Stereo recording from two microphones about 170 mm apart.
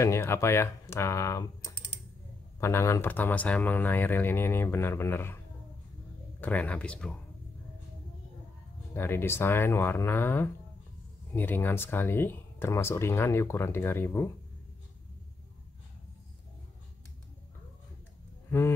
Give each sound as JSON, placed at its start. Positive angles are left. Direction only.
{"t": 0.0, "sound": "speech", "side_deg": 15}
{"t": 2.6, "sound": "speech", "side_deg": 15}
{"t": 6.4, "sound": "speech", "side_deg": 10}
{"t": 8.9, "sound": "speech", "side_deg": 15}